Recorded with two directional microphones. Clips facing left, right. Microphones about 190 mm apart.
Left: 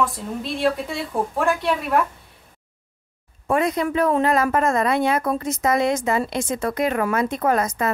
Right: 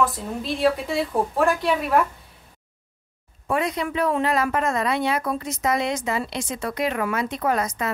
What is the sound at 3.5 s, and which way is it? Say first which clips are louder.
Speech: left 4 dB; 45° left (ahead or behind).